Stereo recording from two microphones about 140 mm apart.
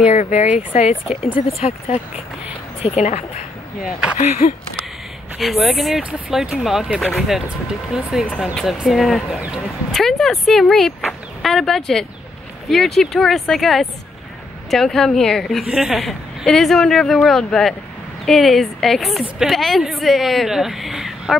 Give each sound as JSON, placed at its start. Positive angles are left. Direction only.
{"t": 0.0, "sound": "speech", "side_deg": 55}
{"t": 5.4, "sound": "a woman's voice", "side_deg": 0}